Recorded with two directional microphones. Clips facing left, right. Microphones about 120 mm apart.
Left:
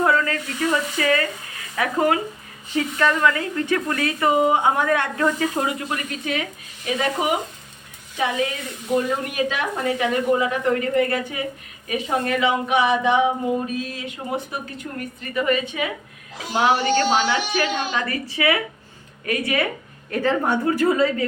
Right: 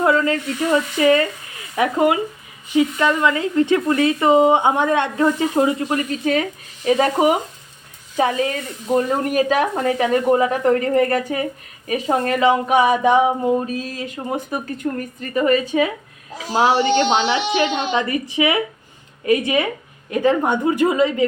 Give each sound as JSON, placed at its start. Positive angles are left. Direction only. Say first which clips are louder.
{"t": 0.0, "sound": "a woman's voice", "louder": "right 3 dB", "side_deg": -25}
{"t": 8.9, "sound": "a woman's voice", "louder": "right 4 dB", "side_deg": -40}